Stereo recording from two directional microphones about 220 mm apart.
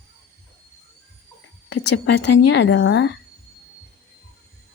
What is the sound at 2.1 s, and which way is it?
Speech, 50° left (ahead or behind).